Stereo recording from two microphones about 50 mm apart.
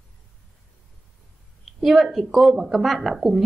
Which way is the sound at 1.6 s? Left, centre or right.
Centre.